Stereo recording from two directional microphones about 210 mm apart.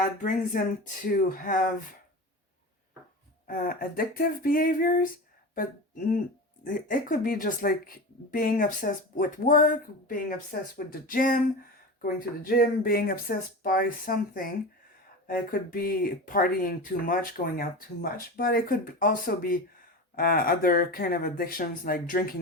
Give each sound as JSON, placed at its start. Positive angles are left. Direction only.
{"t": 0.2, "sound": "speech", "side_deg": 40}
{"t": 3.4, "sound": "speech", "side_deg": 40}
{"t": 6.7, "sound": "speech", "side_deg": 40}